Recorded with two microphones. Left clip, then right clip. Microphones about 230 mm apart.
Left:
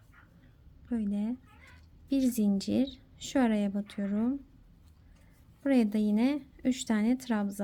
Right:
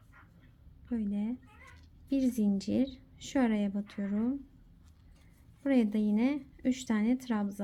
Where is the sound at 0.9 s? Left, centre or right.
Centre.